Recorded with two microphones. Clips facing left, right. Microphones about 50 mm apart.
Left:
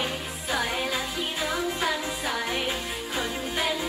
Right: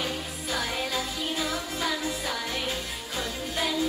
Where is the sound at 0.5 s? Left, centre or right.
Centre.